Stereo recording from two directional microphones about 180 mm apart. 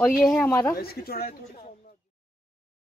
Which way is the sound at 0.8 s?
55° left (ahead or behind).